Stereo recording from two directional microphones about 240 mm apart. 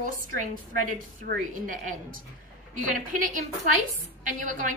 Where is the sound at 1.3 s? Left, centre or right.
Right.